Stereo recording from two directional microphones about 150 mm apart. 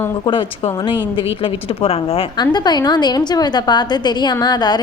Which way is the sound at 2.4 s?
30° left (ahead or behind).